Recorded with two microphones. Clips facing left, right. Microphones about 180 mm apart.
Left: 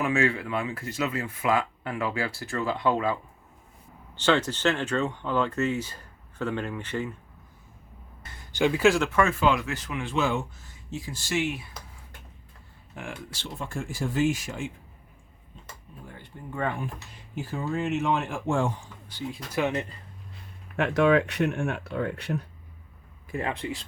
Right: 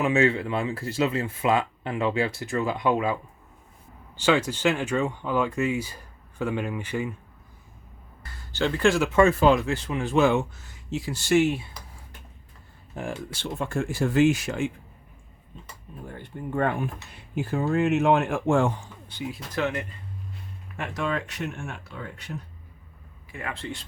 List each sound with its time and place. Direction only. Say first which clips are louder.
0.0 s speech: right 3 dB; 25° right (ahead or behind)
8.2 s speech: left 2 dB; 20° left (ahead or behind)
9.1 s speech: right 5 dB; 35° right (ahead or behind)
10.2 s speech: right 6 dB; 65° right (ahead or behind)
13.0 s speech: right 6 dB; 35° right (ahead or behind)
13.3 s speech: right 7 dB; 60° right (ahead or behind)
16.0 s speech: right 7 dB; 55° right (ahead or behind)
19.1 s speech: right 1 dB; 25° right (ahead or behind)
19.5 s speech: left 1 dB; 15° left (ahead or behind)
20.7 s speech: left 8 dB; 70° left (ahead or behind)
23.3 s speech: left 5 dB; 30° left (ahead or behind)